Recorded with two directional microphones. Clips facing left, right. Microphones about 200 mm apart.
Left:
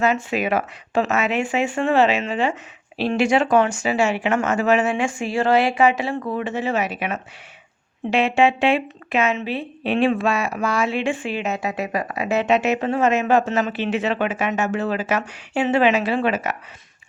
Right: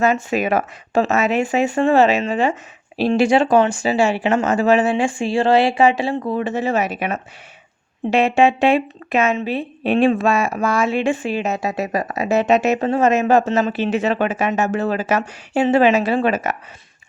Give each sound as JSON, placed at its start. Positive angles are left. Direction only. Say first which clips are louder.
{"t": 0.0, "sound": "speech", "louder": "right 3 dB", "side_deg": -45}
{"t": 3.1, "sound": "speech", "louder": "right 3 dB", "side_deg": -30}